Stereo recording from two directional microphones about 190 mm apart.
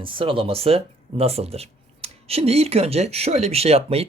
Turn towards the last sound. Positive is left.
turn(degrees=-30)  # may be behind; listen again after turning